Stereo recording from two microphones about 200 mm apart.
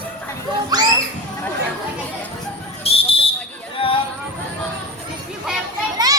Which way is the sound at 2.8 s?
30° left (ahead or behind).